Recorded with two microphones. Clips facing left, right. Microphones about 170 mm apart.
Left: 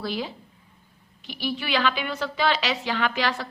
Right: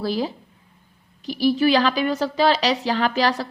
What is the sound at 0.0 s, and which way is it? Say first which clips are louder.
A woman's voice: right 6 dB; 40° right (ahead or behind).